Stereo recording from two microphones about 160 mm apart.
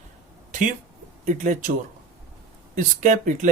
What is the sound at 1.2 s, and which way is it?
Speech, 50° right (ahead or behind).